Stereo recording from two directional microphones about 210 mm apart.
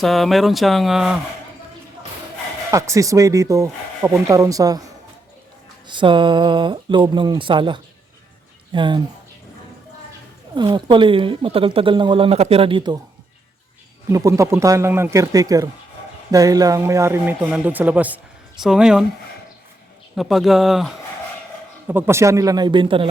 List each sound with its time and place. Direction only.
0.0 s speech: centre (ahead or behind)
2.6 s speech: 15° right (ahead or behind)
5.9 s speech: 25° right (ahead or behind)
10.5 s speech: 20° right (ahead or behind)
14.1 s speech: 15° right (ahead or behind)
20.1 s speech: centre (ahead or behind); by 23.0 s 25° right (ahead or behind)